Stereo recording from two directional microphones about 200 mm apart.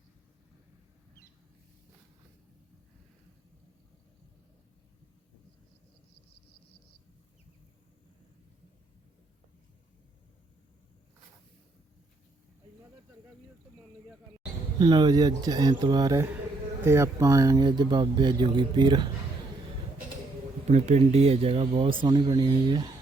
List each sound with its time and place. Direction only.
14.8 s speech: 20° right (ahead or behind)
20.7 s speech: 35° right (ahead or behind)